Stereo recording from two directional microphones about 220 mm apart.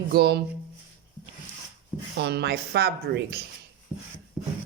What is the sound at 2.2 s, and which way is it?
Speech, 50° right (ahead or behind).